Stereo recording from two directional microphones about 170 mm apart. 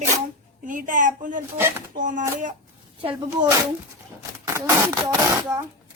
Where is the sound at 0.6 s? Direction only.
50° right (ahead or behind).